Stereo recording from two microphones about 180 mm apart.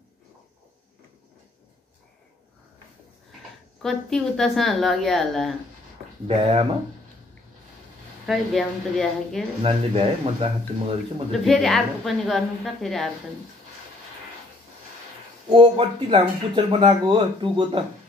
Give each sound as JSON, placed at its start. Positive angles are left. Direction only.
{"t": 3.8, "sound": "speech", "side_deg": 0}
{"t": 6.2, "sound": "speech", "side_deg": -30}
{"t": 8.3, "sound": "speech", "side_deg": 0}
{"t": 9.6, "sound": "speech", "side_deg": -30}
{"t": 11.3, "sound": "speech", "side_deg": 0}
{"t": 15.5, "sound": "speech", "side_deg": -30}